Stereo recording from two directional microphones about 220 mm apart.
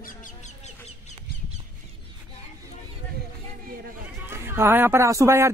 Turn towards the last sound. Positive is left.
turn(degrees=-10)  # may be behind; listen again after turning